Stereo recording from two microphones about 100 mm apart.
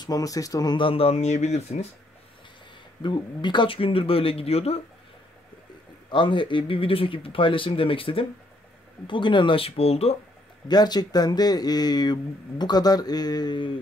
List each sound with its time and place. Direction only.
0.0 s speech: 35° left (ahead or behind)
0.7 s speech: 65° left (ahead or behind); by 1.9 s 90° left
3.0 s speech: 50° left (ahead or behind); by 4.7 s 90° left
6.0 s speech: 55° left (ahead or behind)
9.0 s speech: 55° left (ahead or behind); by 10.1 s 85° left
10.7 s speech: 45° left (ahead or behind)